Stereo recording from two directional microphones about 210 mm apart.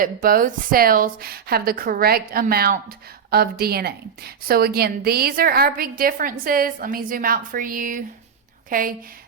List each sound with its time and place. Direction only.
0.0 s a woman's voice: 40° right (ahead or behind)